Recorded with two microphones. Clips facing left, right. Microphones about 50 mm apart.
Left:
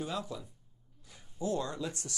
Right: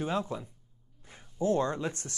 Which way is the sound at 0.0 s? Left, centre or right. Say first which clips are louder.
Right 6 dB; right.